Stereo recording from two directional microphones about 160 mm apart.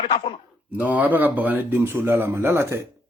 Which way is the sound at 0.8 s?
10° right (ahead or behind).